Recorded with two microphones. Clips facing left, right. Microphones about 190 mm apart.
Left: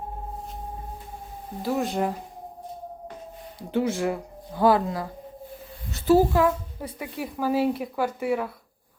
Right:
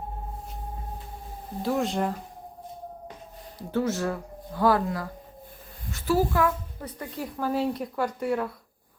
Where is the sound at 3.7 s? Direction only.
15° left (ahead or behind).